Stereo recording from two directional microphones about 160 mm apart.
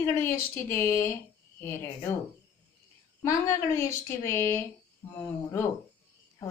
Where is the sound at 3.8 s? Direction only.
15° left (ahead or behind).